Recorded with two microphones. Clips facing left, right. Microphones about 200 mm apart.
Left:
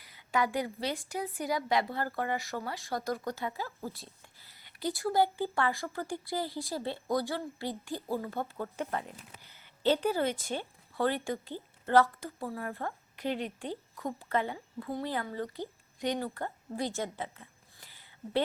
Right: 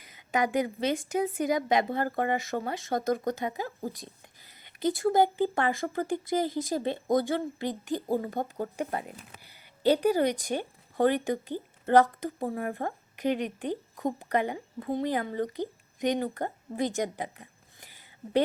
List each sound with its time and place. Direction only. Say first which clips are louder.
0.0 s a woman's voice: right 3 dB; 20° right (ahead or behind)
3.9 s a sound: right 5 dB; 15° right (ahead or behind)
5.1 s a woman's voice: right 4 dB; 20° right (ahead or behind)